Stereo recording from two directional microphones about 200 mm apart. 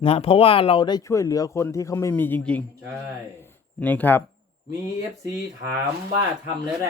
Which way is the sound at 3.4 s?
10° left (ahead or behind).